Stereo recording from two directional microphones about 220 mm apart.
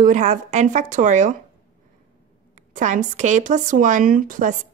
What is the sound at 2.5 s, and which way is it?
Speech, 35° right (ahead or behind).